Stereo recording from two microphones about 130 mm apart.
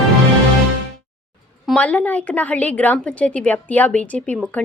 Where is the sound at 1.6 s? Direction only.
5° left (ahead or behind).